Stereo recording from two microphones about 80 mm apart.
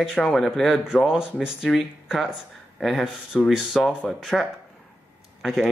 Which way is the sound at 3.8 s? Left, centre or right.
Centre.